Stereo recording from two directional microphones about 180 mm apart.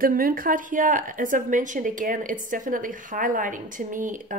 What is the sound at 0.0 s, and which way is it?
Speech, 50° right (ahead or behind).